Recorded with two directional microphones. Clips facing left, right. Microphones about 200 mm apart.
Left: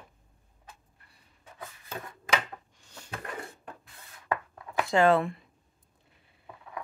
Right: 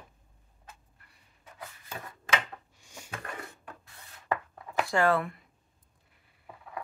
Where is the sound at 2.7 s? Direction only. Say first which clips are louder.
Right 1 dB; 10° right (ahead or behind).